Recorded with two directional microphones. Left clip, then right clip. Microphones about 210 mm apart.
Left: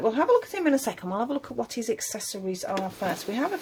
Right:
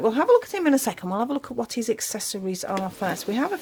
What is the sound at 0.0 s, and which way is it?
Speech, 45° right (ahead or behind).